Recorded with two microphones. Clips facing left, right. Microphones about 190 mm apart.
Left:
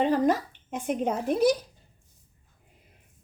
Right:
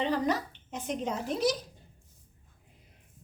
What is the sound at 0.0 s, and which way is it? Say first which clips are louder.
A woman's voice: left 5 dB; 50° left (ahead or behind).